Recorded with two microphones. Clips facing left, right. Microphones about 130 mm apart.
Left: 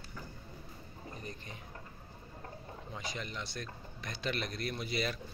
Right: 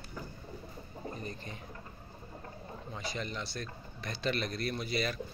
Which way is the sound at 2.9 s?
15° left (ahead or behind).